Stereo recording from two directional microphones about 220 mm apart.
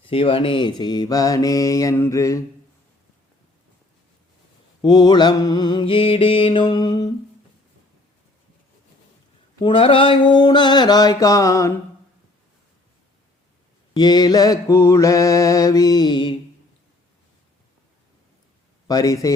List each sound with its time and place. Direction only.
0.0 s mantra: 25° left (ahead or behind)
4.8 s mantra: 20° left (ahead or behind)
9.6 s mantra: 25° left (ahead or behind)
13.9 s mantra: 20° left (ahead or behind)
18.9 s mantra: 15° left (ahead or behind)